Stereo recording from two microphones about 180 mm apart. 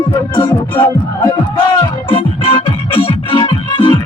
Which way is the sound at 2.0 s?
30° left (ahead or behind).